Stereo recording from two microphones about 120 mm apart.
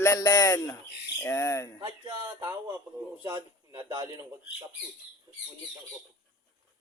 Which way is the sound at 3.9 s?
40° right (ahead or behind).